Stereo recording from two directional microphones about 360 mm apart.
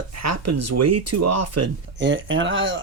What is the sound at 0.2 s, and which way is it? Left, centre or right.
Speech, right.